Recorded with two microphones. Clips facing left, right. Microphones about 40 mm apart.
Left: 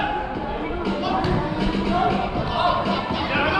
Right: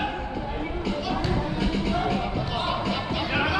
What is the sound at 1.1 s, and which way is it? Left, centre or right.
Music, centre.